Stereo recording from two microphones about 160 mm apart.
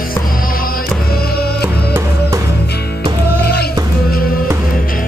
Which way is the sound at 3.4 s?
75° left (ahead or behind).